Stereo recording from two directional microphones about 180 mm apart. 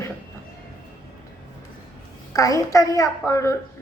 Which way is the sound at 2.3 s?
20° left (ahead or behind).